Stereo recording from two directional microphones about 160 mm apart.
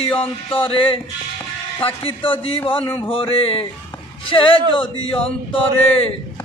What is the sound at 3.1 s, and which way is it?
Speech, 35° left (ahead or behind).